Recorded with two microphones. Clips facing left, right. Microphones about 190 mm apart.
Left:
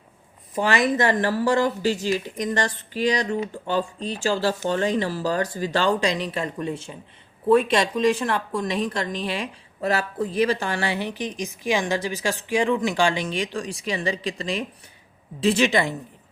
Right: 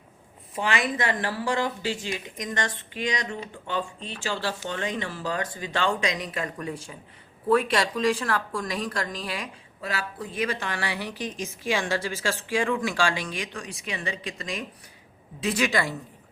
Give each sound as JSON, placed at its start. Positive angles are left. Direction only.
{"t": 0.5, "sound": "a woman's voice", "side_deg": 40}
{"t": 9.8, "sound": "a woman's voice", "side_deg": 45}